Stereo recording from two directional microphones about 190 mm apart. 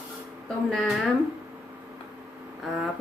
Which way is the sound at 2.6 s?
Centre (ahead or behind).